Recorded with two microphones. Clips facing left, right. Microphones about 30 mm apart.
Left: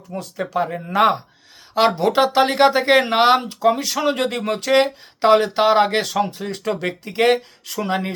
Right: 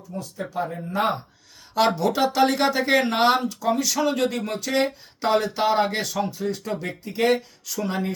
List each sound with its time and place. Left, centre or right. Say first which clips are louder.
0.1 s speech: left 7 dB; left
1.7 s speech: left 4 dB; left
2.0 s speech: left 4 dB; left